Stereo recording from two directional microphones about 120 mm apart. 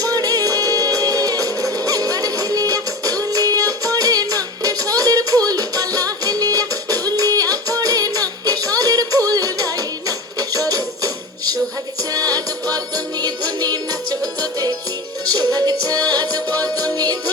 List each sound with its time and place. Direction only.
0.0 s music: 30° right (ahead or behind)